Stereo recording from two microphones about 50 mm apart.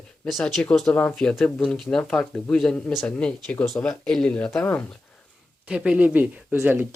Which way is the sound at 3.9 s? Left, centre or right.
Centre.